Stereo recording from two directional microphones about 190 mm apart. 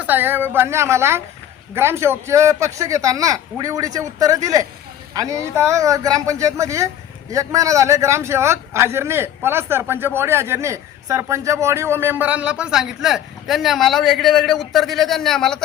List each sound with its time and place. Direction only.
0.0 s speech: 10° right (ahead or behind)